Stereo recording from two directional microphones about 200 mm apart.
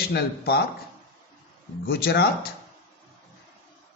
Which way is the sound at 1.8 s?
50° left (ahead or behind).